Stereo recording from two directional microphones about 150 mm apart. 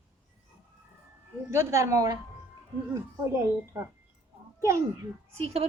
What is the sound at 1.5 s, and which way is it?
A woman's voice, 20° right (ahead or behind).